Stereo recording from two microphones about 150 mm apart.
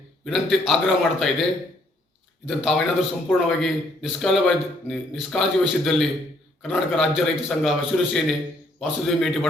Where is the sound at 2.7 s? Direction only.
Centre (ahead or behind).